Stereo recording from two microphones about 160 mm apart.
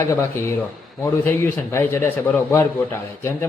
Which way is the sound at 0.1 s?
15° left (ahead or behind).